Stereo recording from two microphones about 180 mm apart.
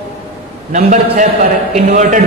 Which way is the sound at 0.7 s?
45° right (ahead or behind).